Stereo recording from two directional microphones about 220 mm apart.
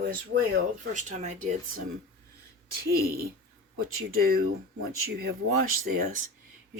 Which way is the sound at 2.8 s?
45° right (ahead or behind).